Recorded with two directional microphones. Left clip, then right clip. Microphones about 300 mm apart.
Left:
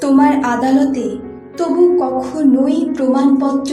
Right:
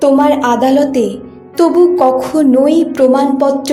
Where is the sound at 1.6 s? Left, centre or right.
Right.